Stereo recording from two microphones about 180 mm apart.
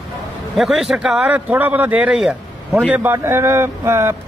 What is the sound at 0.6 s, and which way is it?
Speech, centre (ahead or behind).